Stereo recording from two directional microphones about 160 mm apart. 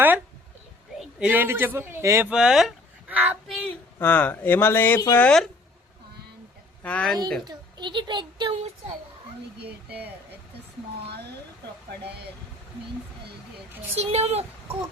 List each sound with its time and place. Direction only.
0.9 s a man's voice: 10° right (ahead or behind)
2.3 s speech: 5° right (ahead or behind)
3.4 s a sound: centre (ahead or behind)
3.9 s speech: 10° left (ahead or behind)
6.8 s speech: 5° left (ahead or behind)
7.4 s a woman's voice: 30° right (ahead or behind)
13.9 s speech: 40° right (ahead or behind)